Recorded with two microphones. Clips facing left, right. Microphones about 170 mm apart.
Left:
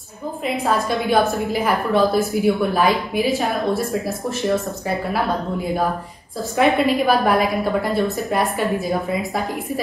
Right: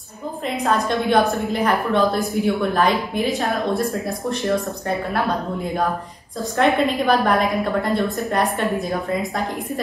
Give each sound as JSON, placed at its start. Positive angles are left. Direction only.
{"t": 0.8, "sound": "a woman's voice", "side_deg": 5}
{"t": 6.6, "sound": "a woman's voice", "side_deg": 5}